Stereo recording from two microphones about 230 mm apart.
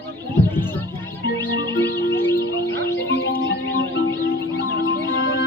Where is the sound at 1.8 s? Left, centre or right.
Left.